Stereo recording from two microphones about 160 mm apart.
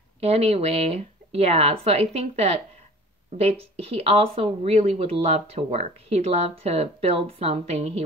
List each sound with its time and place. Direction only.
0.2 s speech: 40° right (ahead or behind)